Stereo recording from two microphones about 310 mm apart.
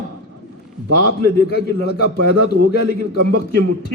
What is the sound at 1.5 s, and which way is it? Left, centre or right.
Speech, left.